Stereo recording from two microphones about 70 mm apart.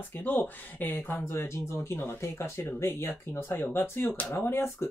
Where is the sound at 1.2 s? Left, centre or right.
Left.